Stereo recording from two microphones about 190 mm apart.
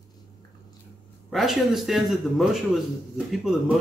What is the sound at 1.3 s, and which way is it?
Speech, centre (ahead or behind).